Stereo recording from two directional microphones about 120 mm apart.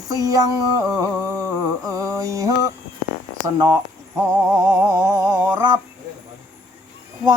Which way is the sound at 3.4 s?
30° right (ahead or behind).